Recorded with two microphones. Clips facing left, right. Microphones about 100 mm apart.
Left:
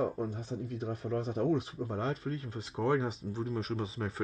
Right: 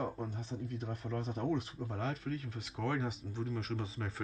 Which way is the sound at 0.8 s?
35° left (ahead or behind).